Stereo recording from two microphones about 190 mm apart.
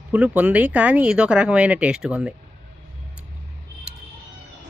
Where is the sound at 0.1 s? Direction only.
5° right (ahead or behind).